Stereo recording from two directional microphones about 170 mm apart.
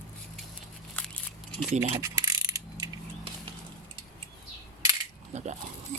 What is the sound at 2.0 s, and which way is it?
Mechanisms, 20° right (ahead or behind).